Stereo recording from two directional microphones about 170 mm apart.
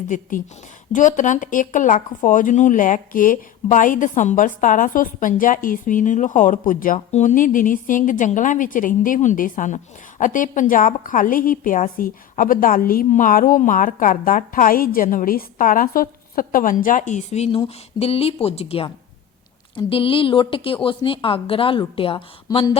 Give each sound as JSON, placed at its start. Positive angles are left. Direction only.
{"t": 0.1, "sound": "a woman's voice", "side_deg": 50}